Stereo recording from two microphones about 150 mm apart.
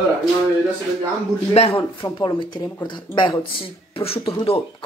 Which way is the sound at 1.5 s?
40° left (ahead or behind).